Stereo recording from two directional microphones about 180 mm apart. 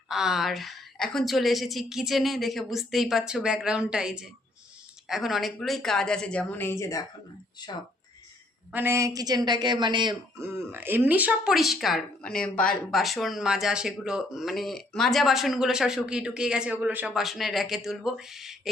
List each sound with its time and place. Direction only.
0.1 s a woman's voice: centre (ahead or behind); by 7.0 s 15° left (ahead or behind)
8.7 s a woman's voice: 15° right (ahead or behind)
10.3 s a woman's voice: 15° right (ahead or behind)